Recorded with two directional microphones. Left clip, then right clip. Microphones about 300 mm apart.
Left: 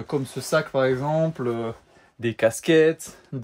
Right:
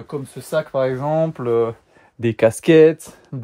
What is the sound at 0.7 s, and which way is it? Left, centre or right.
Speech, centre.